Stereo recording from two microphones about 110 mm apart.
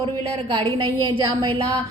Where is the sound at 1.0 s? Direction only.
45° right (ahead or behind).